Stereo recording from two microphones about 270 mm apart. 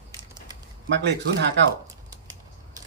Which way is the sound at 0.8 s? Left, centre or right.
Right.